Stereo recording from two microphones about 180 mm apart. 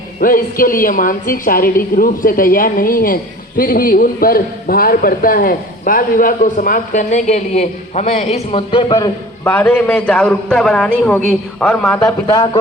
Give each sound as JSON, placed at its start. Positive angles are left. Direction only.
{"t": 0.2, "sound": "a man's voice", "side_deg": 50}
{"t": 9.4, "sound": "a man's voice", "side_deg": 10}